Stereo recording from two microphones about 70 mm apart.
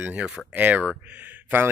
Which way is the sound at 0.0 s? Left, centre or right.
Centre.